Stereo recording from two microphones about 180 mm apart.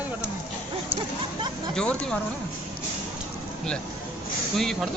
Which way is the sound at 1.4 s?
25° right (ahead or behind).